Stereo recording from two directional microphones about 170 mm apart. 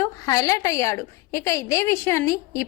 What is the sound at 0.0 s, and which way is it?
A woman's voice, 20° left (ahead or behind).